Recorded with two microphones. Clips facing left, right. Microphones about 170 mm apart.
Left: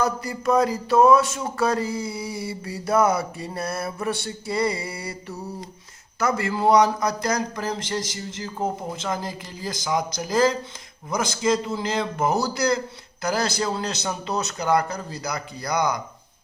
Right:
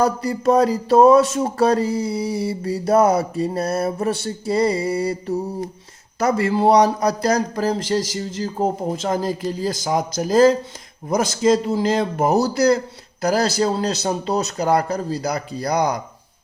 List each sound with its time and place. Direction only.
0.0 s speech: 35° right (ahead or behind)